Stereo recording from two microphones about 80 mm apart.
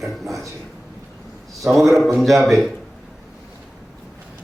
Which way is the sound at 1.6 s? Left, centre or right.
Centre.